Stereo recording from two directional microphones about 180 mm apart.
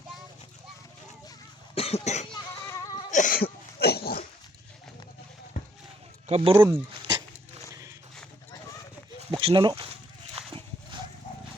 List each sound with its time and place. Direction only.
1.7 s cough: 35° left (ahead or behind)
2.3 s a sound: 20° left (ahead or behind)
3.1 s cough: 45° left (ahead or behind)
6.2 s speech: 35° right (ahead or behind)
6.6 s speech: 10° right (ahead or behind)
7.7 s a sound: 20° right (ahead or behind)
9.3 s speech: 25° right (ahead or behind)